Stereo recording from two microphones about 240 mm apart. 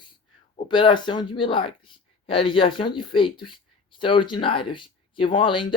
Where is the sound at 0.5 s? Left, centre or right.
Centre.